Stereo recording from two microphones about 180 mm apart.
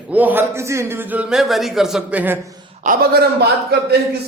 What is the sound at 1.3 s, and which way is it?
Speech, centre (ahead or behind).